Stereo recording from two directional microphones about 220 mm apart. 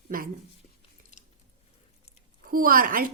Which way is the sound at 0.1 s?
40° right (ahead or behind).